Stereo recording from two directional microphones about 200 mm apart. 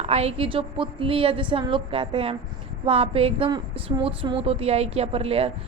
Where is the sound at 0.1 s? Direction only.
30° right (ahead or behind).